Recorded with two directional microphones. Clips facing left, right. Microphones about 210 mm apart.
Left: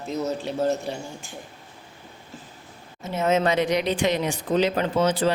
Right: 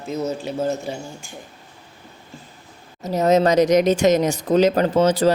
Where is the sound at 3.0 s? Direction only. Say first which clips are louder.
Right 5 dB; 40° right (ahead or behind).